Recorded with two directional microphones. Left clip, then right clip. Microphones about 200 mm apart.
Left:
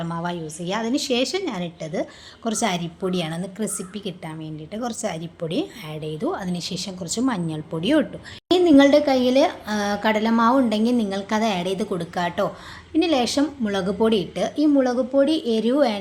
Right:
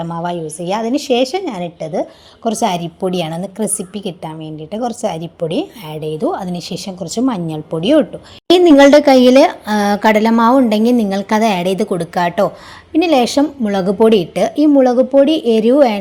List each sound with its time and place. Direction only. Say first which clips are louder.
0.0 s a woman's voice: right 8 dB; 20° right (ahead or behind)
8.4 s speech: right 8 dB; 45° right (ahead or behind)